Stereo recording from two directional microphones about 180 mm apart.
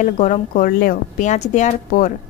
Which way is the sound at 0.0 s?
40° left (ahead or behind).